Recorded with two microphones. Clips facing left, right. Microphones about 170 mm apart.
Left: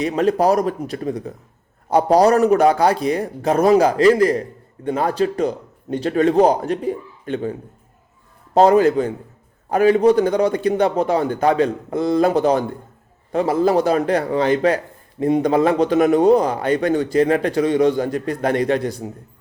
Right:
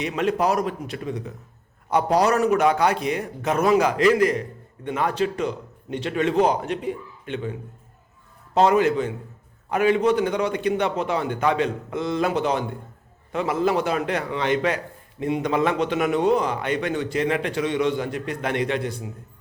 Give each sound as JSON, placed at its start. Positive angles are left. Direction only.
{"t": 0.0, "sound": "a man's voice", "side_deg": 35}
{"t": 8.5, "sound": "a man's voice", "side_deg": 35}